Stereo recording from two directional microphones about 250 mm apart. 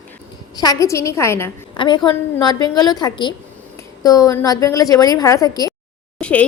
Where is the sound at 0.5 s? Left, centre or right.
Centre.